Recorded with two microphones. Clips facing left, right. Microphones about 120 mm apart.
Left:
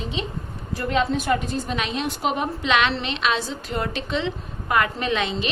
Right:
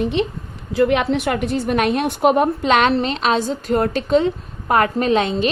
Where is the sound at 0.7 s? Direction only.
85° right.